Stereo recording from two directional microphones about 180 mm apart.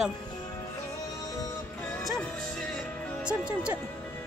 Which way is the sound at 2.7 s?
5° right (ahead or behind).